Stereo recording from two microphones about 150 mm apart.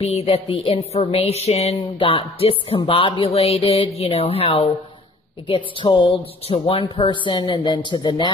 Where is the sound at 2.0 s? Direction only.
35° left (ahead or behind).